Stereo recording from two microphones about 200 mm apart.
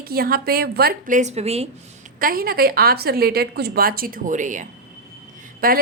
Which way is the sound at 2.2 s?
45° right (ahead or behind).